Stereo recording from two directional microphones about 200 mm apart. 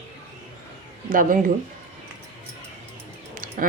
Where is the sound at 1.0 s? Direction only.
45° right (ahead or behind).